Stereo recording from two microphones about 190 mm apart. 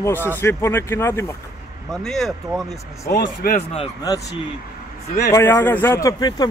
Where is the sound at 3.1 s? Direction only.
55° left (ahead or behind).